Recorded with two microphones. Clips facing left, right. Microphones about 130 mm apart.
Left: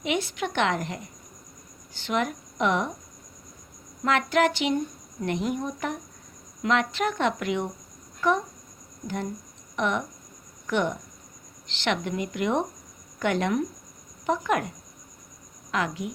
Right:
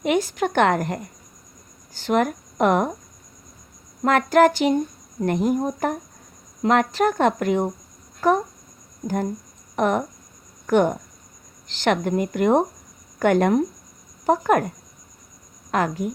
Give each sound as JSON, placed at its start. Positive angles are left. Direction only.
{"t": 0.0, "sound": "a woman's voice", "side_deg": -45}
{"t": 4.0, "sound": "a woman's voice", "side_deg": -45}
{"t": 9.7, "sound": "a woman's voice", "side_deg": -45}
{"t": 15.7, "sound": "a woman's voice", "side_deg": -45}